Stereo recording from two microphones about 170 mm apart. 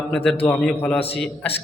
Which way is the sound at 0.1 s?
5° left (ahead or behind).